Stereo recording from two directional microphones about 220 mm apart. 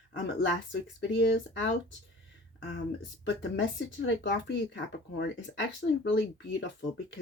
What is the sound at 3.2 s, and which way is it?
Speech, 55° left (ahead or behind).